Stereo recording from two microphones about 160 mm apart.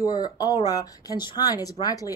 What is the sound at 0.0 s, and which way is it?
Speech, 25° left (ahead or behind).